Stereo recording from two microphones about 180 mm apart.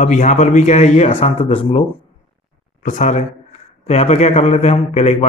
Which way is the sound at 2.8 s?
45° left (ahead or behind).